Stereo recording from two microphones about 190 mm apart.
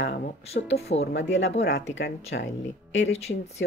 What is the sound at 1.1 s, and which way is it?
Speech, 60° left (ahead or behind).